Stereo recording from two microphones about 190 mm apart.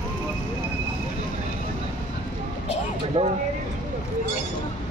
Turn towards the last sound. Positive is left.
turn(degrees=-30)  # may be behind; listen again after turning